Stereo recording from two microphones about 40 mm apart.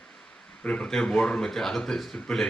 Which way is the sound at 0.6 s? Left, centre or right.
Left.